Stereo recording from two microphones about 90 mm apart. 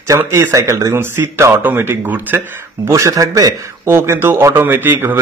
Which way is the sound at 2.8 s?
35° right (ahead or behind).